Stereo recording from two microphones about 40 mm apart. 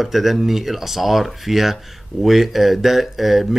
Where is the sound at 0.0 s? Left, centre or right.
Centre.